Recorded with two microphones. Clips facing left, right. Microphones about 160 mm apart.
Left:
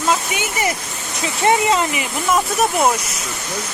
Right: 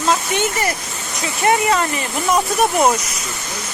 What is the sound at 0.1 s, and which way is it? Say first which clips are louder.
Speech: right 3 dB; 10° left (ahead or behind).